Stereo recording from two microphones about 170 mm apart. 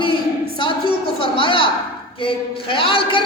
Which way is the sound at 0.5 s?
30° left (ahead or behind).